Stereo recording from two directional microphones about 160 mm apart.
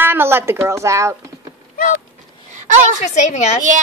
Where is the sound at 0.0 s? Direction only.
15° right (ahead or behind).